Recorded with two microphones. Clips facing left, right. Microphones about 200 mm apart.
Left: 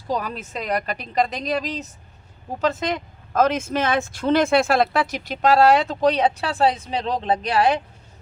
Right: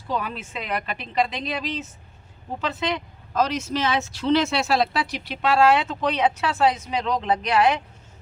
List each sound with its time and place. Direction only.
0.1 s a woman's voice: 40° left (ahead or behind)